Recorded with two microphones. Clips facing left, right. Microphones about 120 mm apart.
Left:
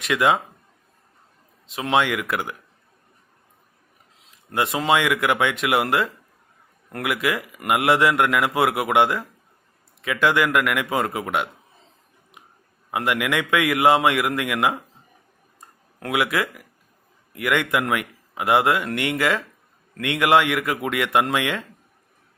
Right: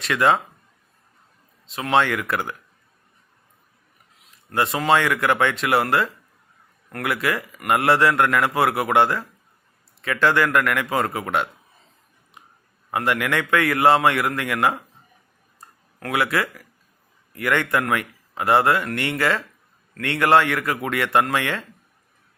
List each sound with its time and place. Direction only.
0.0 s a man's voice: 10° left (ahead or behind)
1.7 s a man's voice: 15° left (ahead or behind)
4.5 s a man's voice: 20° left (ahead or behind)
12.9 s a man's voice: 10° left (ahead or behind)
16.0 s a man's voice: 20° left (ahead or behind)